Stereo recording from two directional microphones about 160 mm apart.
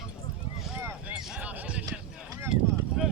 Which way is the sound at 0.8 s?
10° right (ahead or behind).